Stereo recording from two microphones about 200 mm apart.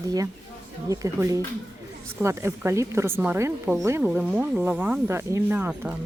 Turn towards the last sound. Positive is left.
turn(degrees=-10)  # may be behind; listen again after turning